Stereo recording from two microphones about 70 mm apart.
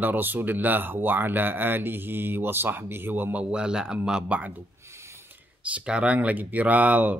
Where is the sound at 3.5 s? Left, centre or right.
Centre.